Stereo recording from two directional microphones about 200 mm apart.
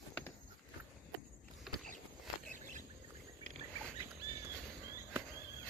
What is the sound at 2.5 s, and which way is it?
Rodents, 40° right (ahead or behind).